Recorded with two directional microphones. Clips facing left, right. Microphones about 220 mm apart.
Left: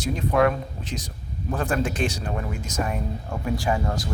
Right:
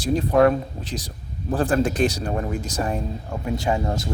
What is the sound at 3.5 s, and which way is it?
Speech, 25° right (ahead or behind).